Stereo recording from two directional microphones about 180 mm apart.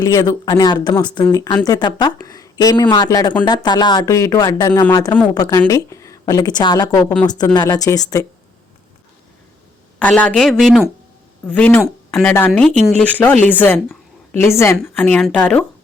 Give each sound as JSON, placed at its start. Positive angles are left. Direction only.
{"t": 0.0, "sound": "speech", "side_deg": 20}
{"t": 10.0, "sound": "speech", "side_deg": 5}